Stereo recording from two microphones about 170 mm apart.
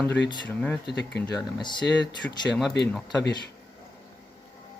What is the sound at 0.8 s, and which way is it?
Speech, 80° left.